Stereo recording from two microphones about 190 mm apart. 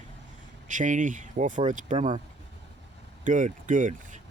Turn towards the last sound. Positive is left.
turn(degrees=-40)  # may be behind; listen again after turning